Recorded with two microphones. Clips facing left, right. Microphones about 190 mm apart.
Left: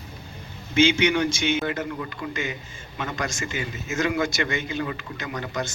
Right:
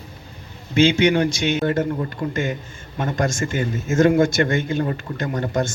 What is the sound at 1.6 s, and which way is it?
A man's voice, 45° right (ahead or behind).